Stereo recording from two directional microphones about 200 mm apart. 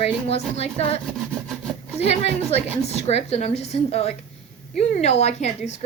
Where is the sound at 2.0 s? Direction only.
30° left (ahead or behind).